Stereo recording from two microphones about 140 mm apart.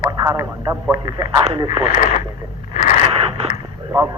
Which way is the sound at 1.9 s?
60° left (ahead or behind).